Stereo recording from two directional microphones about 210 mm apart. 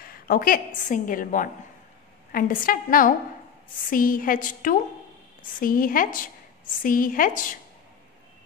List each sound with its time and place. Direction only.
0.0 s a woman's voice: 45° left (ahead or behind)